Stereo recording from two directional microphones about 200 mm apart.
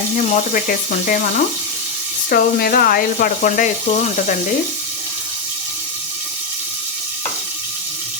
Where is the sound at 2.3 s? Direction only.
50° left (ahead or behind).